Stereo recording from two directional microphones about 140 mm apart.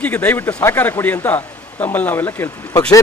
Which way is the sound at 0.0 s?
10° left (ahead or behind).